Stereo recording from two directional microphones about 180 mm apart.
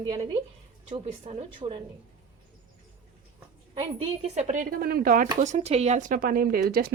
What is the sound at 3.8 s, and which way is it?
Speech, 40° right (ahead or behind).